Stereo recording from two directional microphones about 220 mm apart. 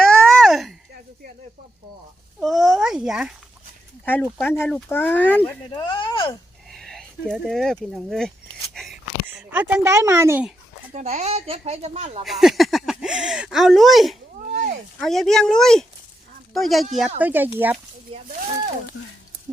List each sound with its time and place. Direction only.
0.0 s a sound: 5° left (ahead or behind)
2.4 s a sound: centre (ahead or behind)
4.0 s speech: 10° left (ahead or behind)
5.7 s speech: 20° left (ahead or behind)
6.7 s speech: centre (ahead or behind)
8.7 s a sound: centre (ahead or behind)
9.5 s speech: 10° right (ahead or behind)
10.9 s speech: 30° right (ahead or behind)
12.2 s speech: centre (ahead or behind)
18.1 s speech: 35° right (ahead or behind)